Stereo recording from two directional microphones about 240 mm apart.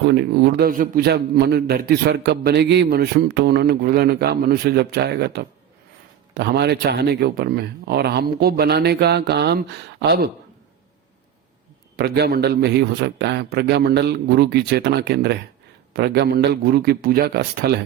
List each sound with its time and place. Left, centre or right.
0.1 s a man's voice: right
11.9 s a man's voice: right